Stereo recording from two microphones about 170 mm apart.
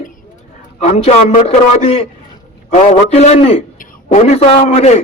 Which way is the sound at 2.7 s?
40° left (ahead or behind).